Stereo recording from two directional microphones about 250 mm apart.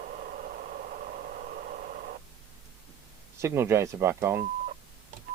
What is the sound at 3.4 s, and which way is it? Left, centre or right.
Speech, centre.